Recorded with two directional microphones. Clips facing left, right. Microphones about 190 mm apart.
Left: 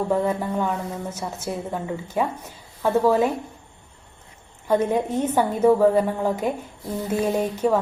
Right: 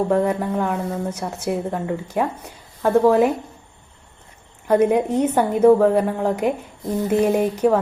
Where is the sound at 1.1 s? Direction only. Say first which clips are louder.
Right 5 dB; 10° right (ahead or behind).